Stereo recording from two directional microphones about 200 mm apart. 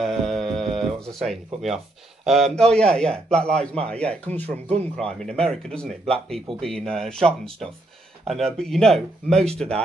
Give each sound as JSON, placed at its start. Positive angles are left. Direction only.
{"t": 0.0, "sound": "a sound", "side_deg": 0}
{"t": 2.2, "sound": "a man's voice", "side_deg": 0}
{"t": 4.5, "sound": "speech", "side_deg": -30}
{"t": 4.9, "sound": "a man's voice", "side_deg": 5}